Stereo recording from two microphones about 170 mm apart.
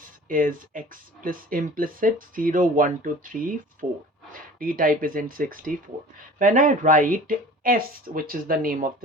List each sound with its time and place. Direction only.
0.0 s speech: 55° right (ahead or behind)